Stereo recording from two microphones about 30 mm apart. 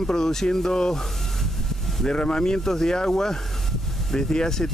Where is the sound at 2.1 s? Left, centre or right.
Left.